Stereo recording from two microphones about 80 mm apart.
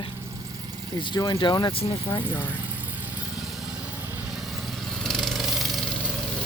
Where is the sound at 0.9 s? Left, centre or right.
Left.